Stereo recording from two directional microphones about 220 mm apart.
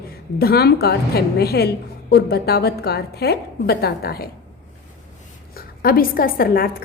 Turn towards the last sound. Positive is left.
turn(degrees=40)  # may be behind; listen again after turning